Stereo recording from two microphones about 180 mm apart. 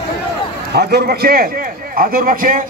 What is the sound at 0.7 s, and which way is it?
A man's voice, 65° right (ahead or behind).